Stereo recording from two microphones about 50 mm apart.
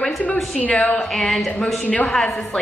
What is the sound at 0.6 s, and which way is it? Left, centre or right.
Speech, left.